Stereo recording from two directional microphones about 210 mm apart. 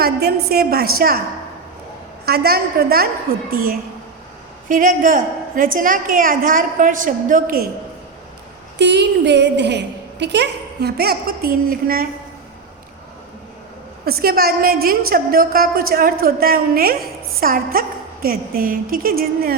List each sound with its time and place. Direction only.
0.0 s a woman's voice: 50° right (ahead or behind)
2.2 s a woman's voice: 50° right (ahead or behind)
8.8 s a woman's voice: 55° right (ahead or behind)
14.0 s a woman's voice: 45° right (ahead or behind)